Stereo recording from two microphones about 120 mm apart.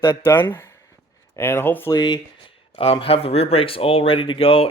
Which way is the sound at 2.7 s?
55° left (ahead or behind).